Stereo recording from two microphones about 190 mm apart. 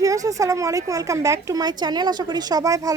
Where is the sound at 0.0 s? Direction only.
15° right (ahead or behind).